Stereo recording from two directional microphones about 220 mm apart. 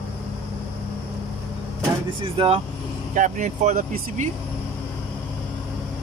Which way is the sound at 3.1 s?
35° right (ahead or behind).